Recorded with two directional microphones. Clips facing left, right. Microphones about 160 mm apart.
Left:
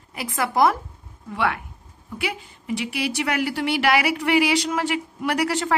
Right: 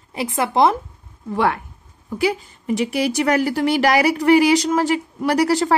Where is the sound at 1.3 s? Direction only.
40° right (ahead or behind).